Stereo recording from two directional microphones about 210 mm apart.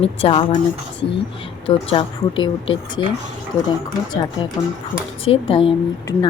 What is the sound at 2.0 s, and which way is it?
A woman's voice, 25° left (ahead or behind).